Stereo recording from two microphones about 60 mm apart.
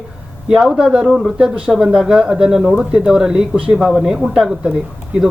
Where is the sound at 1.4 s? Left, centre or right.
Centre.